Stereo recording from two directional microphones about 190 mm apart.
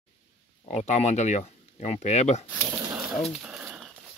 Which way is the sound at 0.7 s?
35° left (ahead or behind).